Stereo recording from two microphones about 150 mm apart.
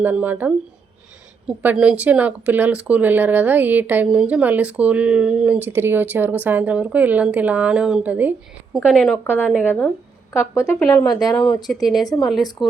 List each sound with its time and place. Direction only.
0.0 s speech: 10° right (ahead or behind)
9.2 s a woman's voice: 15° left (ahead or behind); by 11.7 s 30° left (ahead or behind)
11.7 s speech: centre (ahead or behind)
12.0 s a woman's voice: 25° left (ahead or behind)